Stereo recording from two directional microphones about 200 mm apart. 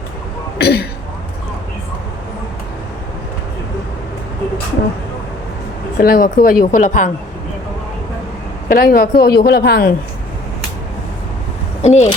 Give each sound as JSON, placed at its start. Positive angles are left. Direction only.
{"t": 0.6, "sound": "a woman's voice", "side_deg": 55}
{"t": 6.0, "sound": "a woman's voice", "side_deg": 45}
{"t": 8.7, "sound": "a woman's voice", "side_deg": 45}
{"t": 11.8, "sound": "speech", "side_deg": 35}